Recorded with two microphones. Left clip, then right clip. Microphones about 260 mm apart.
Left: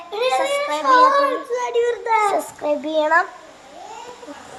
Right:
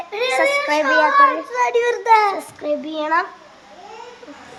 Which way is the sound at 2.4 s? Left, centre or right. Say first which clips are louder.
Left 1 dB; centre.